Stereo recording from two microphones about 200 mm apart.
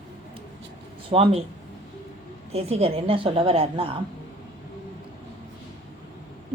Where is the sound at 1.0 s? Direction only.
30° right (ahead or behind).